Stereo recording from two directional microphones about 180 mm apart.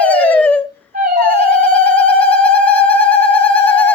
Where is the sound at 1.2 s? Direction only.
10° left (ahead or behind).